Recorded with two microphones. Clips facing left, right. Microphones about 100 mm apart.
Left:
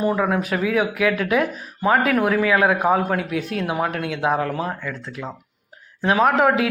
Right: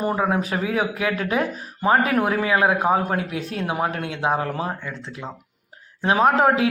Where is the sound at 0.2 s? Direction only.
25° right (ahead or behind).